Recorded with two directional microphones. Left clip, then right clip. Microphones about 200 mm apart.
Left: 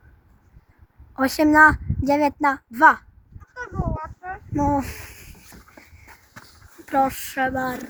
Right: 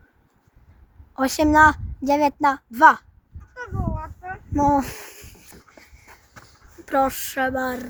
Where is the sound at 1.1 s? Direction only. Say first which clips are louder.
Left 1 dB; centre (ahead or behind).